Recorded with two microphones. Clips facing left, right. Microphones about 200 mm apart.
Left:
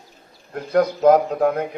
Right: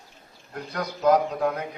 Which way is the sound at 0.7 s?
55° left (ahead or behind).